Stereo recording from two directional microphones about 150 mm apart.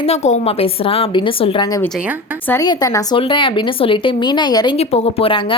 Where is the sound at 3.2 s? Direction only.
35° left (ahead or behind).